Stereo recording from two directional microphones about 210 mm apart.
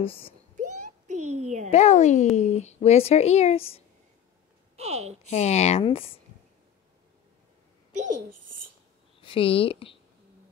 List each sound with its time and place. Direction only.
0.0 s speech: 25° left (ahead or behind)
0.6 s a sound: 35° right (ahead or behind)
1.7 s speech: 35° left (ahead or behind)
4.7 s speech: 30° right (ahead or behind)
5.2 s speech: 30° left (ahead or behind)
7.9 s a woman's voice: 35° right (ahead or behind)
9.2 s speech: 25° left (ahead or behind)